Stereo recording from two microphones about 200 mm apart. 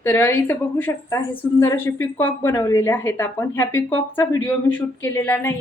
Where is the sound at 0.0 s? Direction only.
10° left (ahead or behind).